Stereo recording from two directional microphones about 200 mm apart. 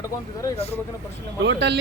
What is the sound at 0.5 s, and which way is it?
Speech, 30° left (ahead or behind).